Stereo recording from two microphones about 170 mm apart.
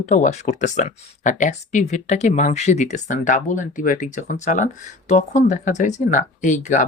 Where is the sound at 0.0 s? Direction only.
45° left (ahead or behind).